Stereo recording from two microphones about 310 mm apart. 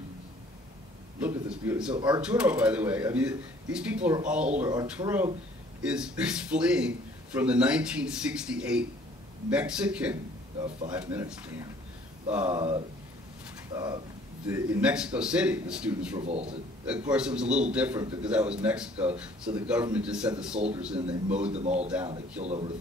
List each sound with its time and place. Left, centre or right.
1.2 s speech: centre
2.0 s speech: centre
2.2 s speech: centre
13.7 s speech: centre
16.2 s a man's voice: centre
16.8 s speech: centre
21.5 s a man's voice: right